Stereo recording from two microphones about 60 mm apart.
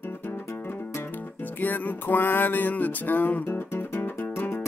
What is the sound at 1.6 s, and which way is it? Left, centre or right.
Music, left.